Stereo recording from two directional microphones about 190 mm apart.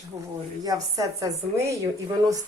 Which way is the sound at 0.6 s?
20° right (ahead or behind).